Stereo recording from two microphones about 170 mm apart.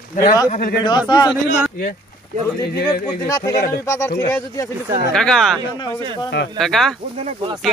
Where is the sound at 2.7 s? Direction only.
70° left (ahead or behind).